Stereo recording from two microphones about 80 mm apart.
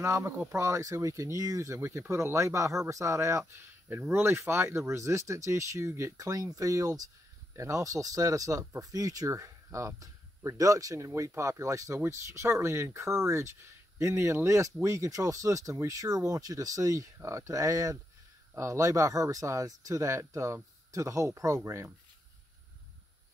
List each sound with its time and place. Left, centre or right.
0.0 s speech: right
1.8 s speech: right